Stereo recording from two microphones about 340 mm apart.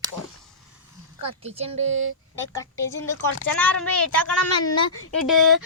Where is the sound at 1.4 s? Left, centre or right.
Centre.